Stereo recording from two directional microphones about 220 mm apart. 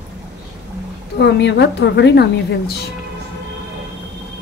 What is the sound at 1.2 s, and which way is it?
A woman's voice, 50° left (ahead or behind).